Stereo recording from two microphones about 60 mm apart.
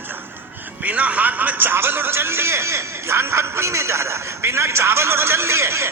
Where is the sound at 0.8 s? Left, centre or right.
Right.